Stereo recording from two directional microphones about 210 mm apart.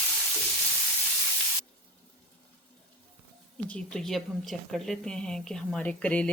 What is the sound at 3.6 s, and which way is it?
A woman's voice, 5° left (ahead or behind).